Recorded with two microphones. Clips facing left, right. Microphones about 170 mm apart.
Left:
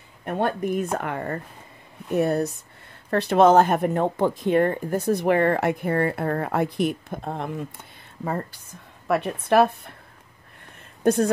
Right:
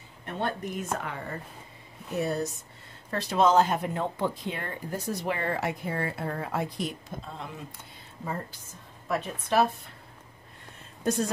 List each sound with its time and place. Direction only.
0.2 s speech: 50° left (ahead or behind)